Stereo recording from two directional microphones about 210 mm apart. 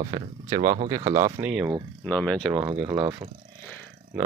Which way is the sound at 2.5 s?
5° right (ahead or behind).